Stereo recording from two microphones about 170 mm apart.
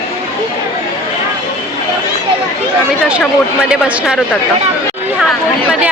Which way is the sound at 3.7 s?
5° right (ahead or behind).